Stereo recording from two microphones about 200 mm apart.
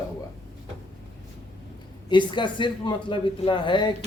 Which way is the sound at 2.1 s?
25° left (ahead or behind).